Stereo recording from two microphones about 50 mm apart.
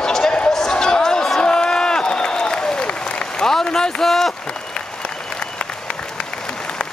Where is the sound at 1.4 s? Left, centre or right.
Centre.